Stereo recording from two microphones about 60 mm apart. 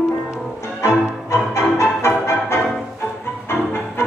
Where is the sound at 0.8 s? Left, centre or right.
Left.